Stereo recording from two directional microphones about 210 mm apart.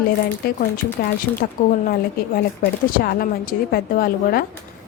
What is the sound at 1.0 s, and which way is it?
Speech, 50° left (ahead or behind).